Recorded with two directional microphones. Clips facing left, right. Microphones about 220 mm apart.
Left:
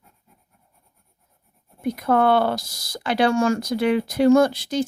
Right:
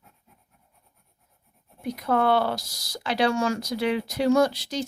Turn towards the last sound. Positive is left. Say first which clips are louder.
# left 5 dB
turn(degrees=50)  # may be behind; listen again after turning